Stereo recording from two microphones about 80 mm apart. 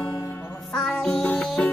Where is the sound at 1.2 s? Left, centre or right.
Centre.